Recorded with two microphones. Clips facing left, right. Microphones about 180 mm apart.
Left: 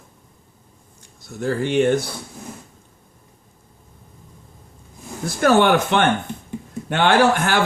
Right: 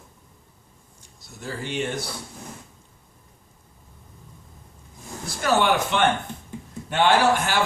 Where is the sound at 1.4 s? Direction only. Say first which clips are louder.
Left 10 dB; 55° left (ahead or behind).